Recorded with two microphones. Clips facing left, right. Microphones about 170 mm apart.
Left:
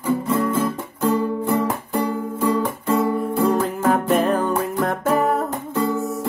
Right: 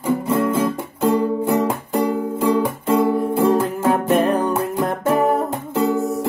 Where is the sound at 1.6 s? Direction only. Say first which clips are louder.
Right 3 dB; 10° right (ahead or behind).